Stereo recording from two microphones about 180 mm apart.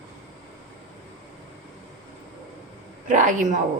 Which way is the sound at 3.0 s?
45° right (ahead or behind).